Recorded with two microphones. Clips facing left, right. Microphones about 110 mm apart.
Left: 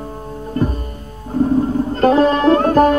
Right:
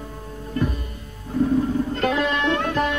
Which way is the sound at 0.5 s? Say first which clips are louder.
Left 5 dB; 35° left (ahead or behind).